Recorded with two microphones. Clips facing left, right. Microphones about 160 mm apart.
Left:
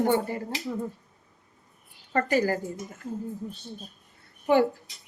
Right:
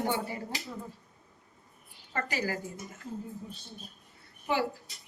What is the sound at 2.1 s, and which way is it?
Speech, 50° left (ahead or behind).